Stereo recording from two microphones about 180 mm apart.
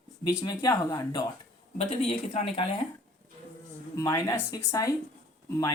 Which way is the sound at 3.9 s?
20° left (ahead or behind).